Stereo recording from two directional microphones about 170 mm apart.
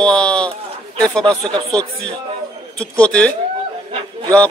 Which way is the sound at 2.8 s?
5° left (ahead or behind).